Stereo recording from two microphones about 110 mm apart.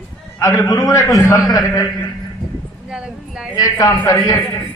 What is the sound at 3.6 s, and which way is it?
Speech, 35° left (ahead or behind).